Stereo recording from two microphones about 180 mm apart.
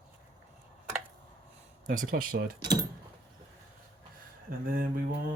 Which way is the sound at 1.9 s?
50° right (ahead or behind).